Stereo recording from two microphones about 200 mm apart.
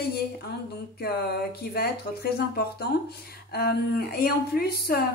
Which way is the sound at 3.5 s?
50° left (ahead or behind).